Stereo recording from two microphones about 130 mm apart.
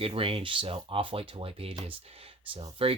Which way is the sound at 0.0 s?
45° right (ahead or behind).